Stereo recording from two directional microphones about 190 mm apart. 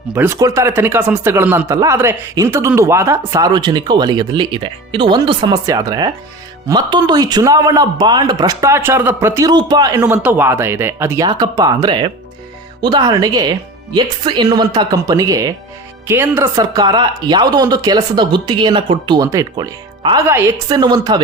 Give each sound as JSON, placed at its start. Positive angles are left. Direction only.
{"t": 0.1, "sound": "speech", "side_deg": -10}